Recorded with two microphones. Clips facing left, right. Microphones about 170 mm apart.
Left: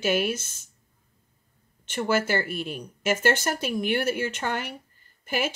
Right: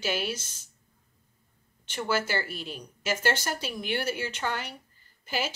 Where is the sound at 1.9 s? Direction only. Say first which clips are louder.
Left 4 dB; 55° left (ahead or behind).